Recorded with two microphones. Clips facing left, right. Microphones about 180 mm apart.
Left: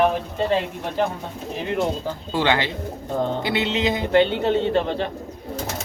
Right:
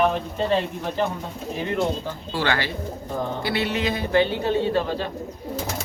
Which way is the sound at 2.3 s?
20° left (ahead or behind).